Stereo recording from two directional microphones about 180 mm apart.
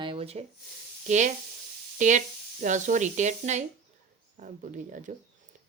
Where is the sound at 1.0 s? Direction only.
40° right (ahead or behind).